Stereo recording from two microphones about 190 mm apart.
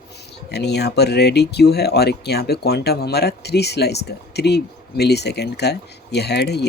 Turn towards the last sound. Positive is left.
turn(degrees=60)  # may be behind; listen again after turning